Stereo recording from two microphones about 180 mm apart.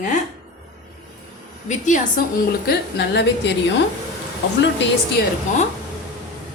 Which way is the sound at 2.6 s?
65° left (ahead or behind).